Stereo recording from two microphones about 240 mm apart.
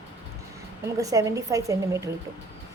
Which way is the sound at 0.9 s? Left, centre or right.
Centre.